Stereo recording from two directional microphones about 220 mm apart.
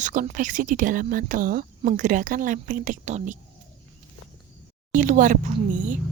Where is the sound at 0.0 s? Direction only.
35° right (ahead or behind).